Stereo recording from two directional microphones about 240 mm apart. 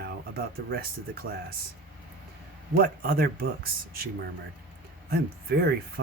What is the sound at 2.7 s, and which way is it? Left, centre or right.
Speech, right.